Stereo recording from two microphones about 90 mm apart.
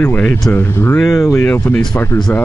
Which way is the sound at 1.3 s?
20° left (ahead or behind).